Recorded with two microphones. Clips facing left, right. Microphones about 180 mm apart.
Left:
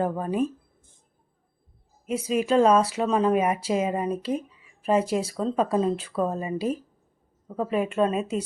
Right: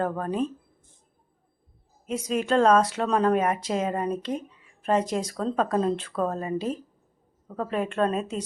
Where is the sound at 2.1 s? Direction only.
5° left (ahead or behind).